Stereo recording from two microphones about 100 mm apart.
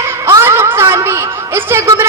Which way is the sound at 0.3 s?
25° right (ahead or behind).